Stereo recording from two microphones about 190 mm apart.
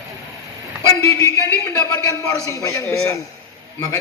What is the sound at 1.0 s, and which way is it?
A man's voice, 15° left (ahead or behind).